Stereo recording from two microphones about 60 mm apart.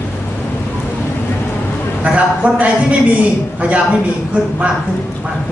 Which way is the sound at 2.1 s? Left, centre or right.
Right.